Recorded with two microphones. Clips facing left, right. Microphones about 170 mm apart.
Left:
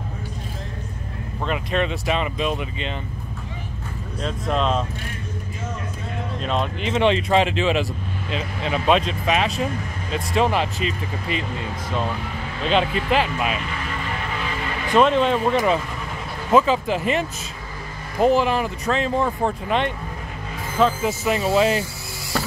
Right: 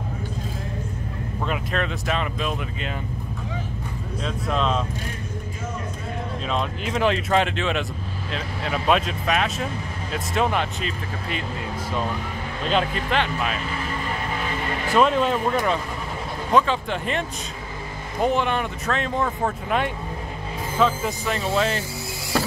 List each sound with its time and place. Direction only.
1.4 s speech: centre (ahead or behind)
4.2 s speech: centre (ahead or behind)
6.4 s speech: centre (ahead or behind)
12.6 s speech: 5° left (ahead or behind)
15.0 s speech: 5° right (ahead or behind)